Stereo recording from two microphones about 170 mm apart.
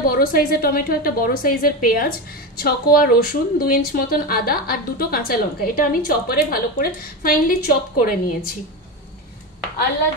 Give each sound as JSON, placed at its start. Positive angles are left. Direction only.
{"t": 0.0, "sound": "a woman's voice", "side_deg": 60}